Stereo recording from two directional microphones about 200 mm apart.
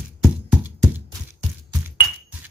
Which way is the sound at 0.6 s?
10° right (ahead or behind).